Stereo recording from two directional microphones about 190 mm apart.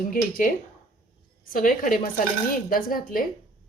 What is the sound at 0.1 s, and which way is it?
Speech, 45° left (ahead or behind).